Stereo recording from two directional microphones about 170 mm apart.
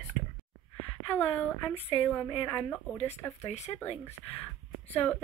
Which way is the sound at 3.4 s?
40° left (ahead or behind).